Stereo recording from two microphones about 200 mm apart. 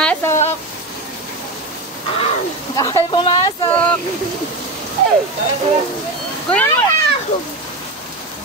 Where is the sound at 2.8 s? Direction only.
20° left (ahead or behind).